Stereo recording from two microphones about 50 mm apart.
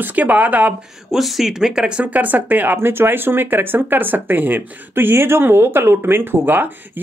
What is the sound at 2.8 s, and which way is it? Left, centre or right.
Speech, right.